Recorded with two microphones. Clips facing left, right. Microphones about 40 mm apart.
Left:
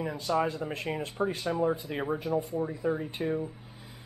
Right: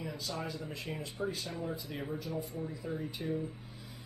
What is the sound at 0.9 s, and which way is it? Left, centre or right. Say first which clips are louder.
Speech: left 6 dB; left.